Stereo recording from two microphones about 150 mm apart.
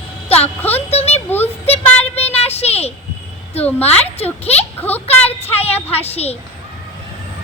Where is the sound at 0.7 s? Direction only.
45° left (ahead or behind).